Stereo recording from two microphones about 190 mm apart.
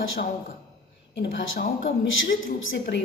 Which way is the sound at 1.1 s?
70° left (ahead or behind).